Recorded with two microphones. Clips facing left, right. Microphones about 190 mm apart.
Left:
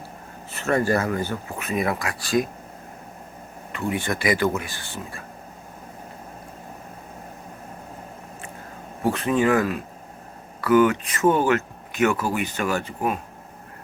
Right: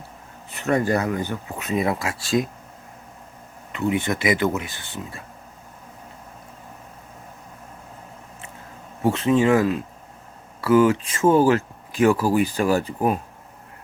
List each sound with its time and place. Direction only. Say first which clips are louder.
0.5 s speech: right 1 dB; 15° right (ahead or behind)
3.7 s speech: right 3 dB; 20° right (ahead or behind)
9.0 s speech: right 2 dB; 25° right (ahead or behind)